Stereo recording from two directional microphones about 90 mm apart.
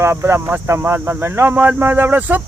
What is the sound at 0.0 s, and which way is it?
Speech, 30° right (ahead or behind).